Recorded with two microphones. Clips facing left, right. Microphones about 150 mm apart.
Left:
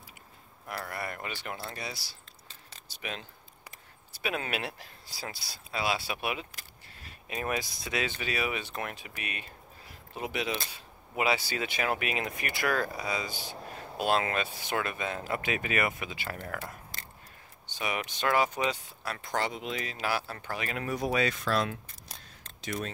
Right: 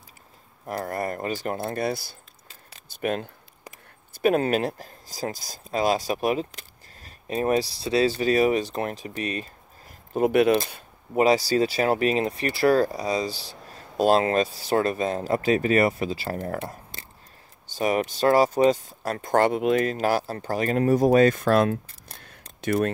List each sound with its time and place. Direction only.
0.7 s speech: 45° right (ahead or behind)
11.1 s speech: 40° right (ahead or behind)
16.5 s a sound: 25° right (ahead or behind)
17.7 s speech: 40° right (ahead or behind); by 22.8 s 65° right (ahead or behind)